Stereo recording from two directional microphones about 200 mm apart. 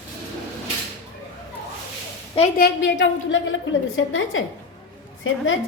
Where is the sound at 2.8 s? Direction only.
65° left (ahead or behind).